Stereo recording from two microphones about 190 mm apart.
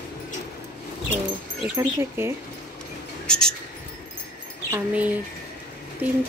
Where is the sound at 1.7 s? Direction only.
15° right (ahead or behind).